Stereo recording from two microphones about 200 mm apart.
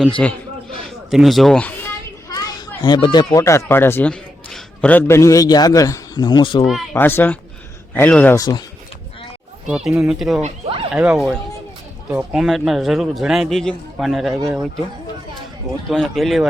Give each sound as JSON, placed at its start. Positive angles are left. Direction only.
{"t": 0.0, "sound": "a man's voice", "side_deg": 5}
{"t": 2.3, "sound": "children playing", "side_deg": 20}
{"t": 3.3, "sound": "a man's voice", "side_deg": 15}
{"t": 6.9, "sound": "a man's voice", "side_deg": 10}
{"t": 9.6, "sound": "a man's voice", "side_deg": -5}
{"t": 10.4, "sound": "speech", "side_deg": -30}
{"t": 10.9, "sound": "a man's voice", "side_deg": -5}
{"t": 15.9, "sound": "a man's voice", "side_deg": 0}